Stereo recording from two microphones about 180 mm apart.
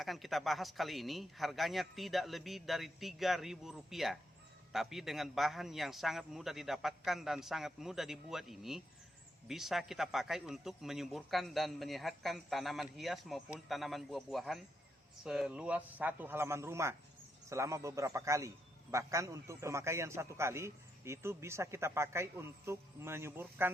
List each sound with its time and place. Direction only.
0.0 s a man's voice: centre (ahead or behind)